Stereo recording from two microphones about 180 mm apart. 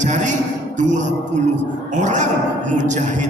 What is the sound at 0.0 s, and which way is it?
Speech, 40° right (ahead or behind).